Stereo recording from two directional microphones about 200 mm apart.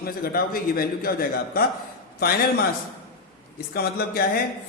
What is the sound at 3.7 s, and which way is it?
Speech, 50° left (ahead or behind).